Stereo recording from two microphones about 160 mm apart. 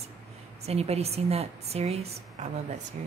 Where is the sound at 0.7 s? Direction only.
40° right (ahead or behind).